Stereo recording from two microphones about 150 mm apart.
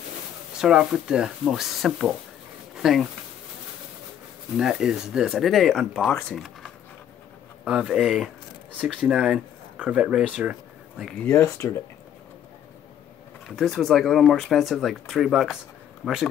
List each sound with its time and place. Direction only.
0.6 s speech: 5° right (ahead or behind)
4.6 s speech: 5° right (ahead or behind)
11.2 s speech: 20° left (ahead or behind)
13.6 s speech: centre (ahead or behind)